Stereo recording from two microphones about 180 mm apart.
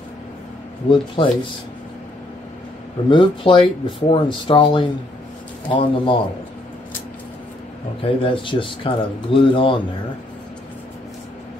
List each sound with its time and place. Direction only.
0.8 s speech: 30° left (ahead or behind)
3.1 s speech: 25° left (ahead or behind)
8.0 s speech: 30° left (ahead or behind)